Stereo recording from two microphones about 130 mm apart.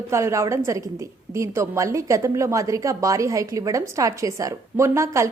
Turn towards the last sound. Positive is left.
turn(degrees=-20)  # may be behind; listen again after turning